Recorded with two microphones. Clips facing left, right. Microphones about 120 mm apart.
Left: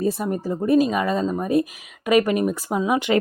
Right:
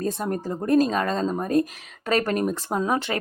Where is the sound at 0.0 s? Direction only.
5° left (ahead or behind).